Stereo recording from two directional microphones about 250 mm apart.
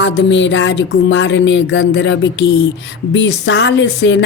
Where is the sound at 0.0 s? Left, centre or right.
Left.